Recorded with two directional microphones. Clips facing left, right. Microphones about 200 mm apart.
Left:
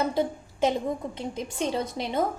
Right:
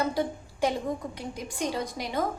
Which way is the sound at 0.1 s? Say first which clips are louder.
Left 2 dB; 20° left (ahead or behind).